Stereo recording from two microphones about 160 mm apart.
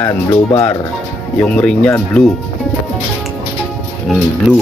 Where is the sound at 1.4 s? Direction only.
10° left (ahead or behind).